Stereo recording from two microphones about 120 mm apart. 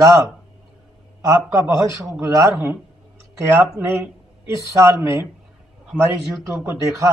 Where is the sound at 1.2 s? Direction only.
25° right (ahead or behind).